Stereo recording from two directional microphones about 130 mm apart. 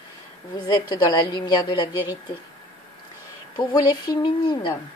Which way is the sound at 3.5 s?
30° left (ahead or behind).